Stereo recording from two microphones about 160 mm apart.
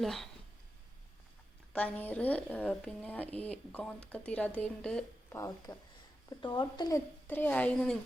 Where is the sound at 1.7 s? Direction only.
10° left (ahead or behind).